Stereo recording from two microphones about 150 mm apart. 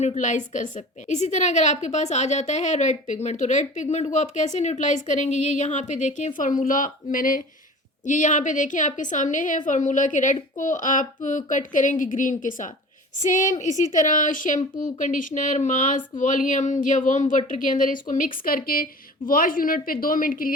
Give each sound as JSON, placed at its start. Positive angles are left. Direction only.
{"t": 0.0, "sound": "a woman's voice", "side_deg": 50}